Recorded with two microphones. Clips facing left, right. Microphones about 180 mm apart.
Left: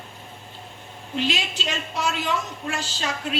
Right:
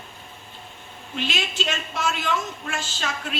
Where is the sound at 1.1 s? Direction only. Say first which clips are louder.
Left 2 dB; 35° left (ahead or behind).